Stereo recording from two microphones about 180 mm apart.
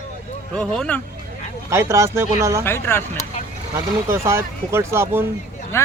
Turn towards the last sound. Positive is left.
turn(degrees=15)  # may be behind; listen again after turning